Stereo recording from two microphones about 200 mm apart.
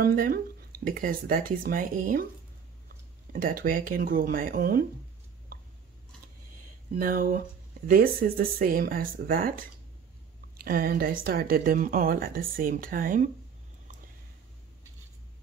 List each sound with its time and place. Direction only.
0.0 s speech: 45° right (ahead or behind)
3.3 s speech: 45° right (ahead or behind)
7.0 s speech: 45° right (ahead or behind)